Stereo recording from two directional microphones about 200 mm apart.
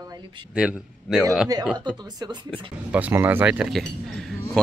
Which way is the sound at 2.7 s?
5° right (ahead or behind).